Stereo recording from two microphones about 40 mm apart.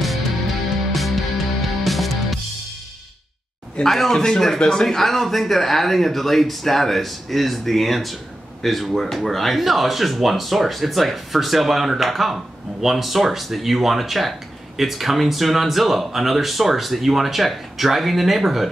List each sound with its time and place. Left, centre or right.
0.9 s music: centre
3.8 s speech: centre
4.1 s speech: centre